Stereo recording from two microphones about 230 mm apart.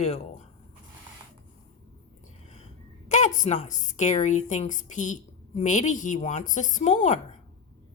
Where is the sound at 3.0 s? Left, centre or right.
Left.